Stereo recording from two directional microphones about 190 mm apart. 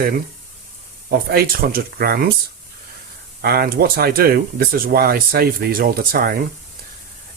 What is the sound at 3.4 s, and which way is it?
Speech, 55° right (ahead or behind).